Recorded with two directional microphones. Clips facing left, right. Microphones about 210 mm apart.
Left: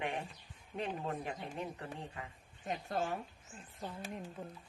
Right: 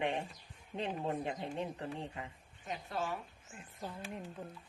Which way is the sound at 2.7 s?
45° left (ahead or behind).